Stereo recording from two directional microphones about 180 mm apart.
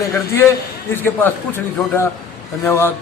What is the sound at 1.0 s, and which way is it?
A man's voice, 10° left (ahead or behind).